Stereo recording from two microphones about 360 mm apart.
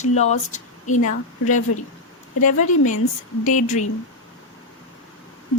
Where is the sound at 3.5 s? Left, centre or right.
Left.